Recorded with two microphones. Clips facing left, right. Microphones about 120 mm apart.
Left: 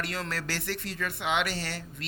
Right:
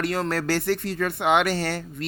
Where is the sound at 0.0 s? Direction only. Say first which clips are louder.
Right 9 dB; 45° right (ahead or behind).